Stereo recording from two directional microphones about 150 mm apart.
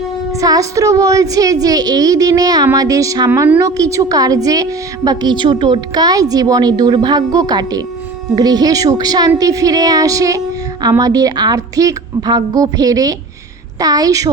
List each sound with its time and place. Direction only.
0.3 s a woman's voice: 25° right (ahead or behind)